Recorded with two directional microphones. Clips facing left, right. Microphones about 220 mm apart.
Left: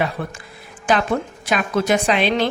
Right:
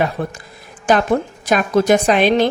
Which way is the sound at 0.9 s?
40° right (ahead or behind).